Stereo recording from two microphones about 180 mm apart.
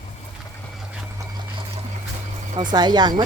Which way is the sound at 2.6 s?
25° right (ahead or behind).